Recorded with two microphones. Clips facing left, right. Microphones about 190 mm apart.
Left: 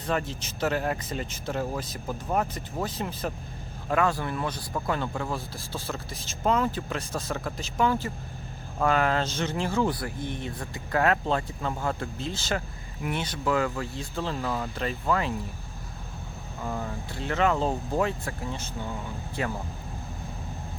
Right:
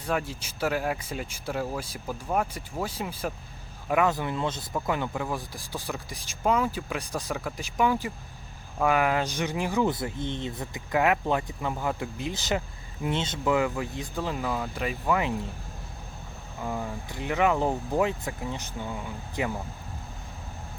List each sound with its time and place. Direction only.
0.0 s speech: 10° right (ahead or behind)
16.6 s speech: 5° right (ahead or behind)